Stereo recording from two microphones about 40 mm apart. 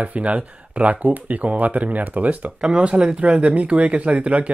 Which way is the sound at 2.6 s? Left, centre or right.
Right.